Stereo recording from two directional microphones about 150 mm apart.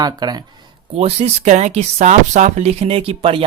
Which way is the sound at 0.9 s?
45° right (ahead or behind).